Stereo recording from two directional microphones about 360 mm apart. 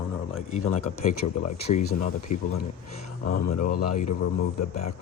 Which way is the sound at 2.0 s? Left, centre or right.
Left.